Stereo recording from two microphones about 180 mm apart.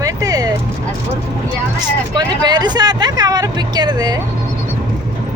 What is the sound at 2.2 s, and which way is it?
Speech, 25° right (ahead or behind).